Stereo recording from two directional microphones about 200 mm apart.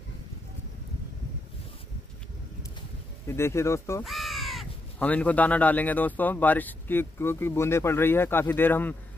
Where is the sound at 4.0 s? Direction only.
Centre (ahead or behind).